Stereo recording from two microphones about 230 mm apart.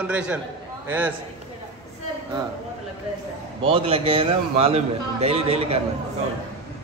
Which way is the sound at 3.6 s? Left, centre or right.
Right.